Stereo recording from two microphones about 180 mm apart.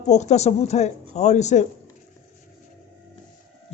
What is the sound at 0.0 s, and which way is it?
A man's voice, 40° left (ahead or behind).